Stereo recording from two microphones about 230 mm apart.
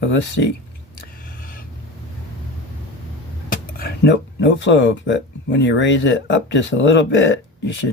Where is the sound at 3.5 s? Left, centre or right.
Left.